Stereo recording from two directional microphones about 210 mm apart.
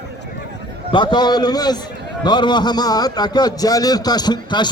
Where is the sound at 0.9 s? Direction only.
20° left (ahead or behind).